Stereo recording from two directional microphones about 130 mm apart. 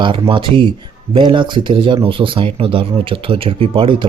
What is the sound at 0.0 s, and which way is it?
Speech, 40° right (ahead or behind).